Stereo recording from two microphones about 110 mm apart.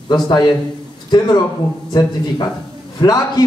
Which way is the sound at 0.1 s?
40° left (ahead or behind).